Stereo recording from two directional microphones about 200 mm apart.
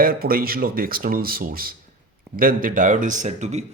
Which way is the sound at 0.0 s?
45° right (ahead or behind).